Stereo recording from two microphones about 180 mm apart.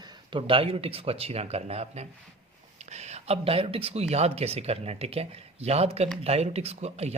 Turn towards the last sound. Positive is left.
turn(degrees=-35)  # may be behind; listen again after turning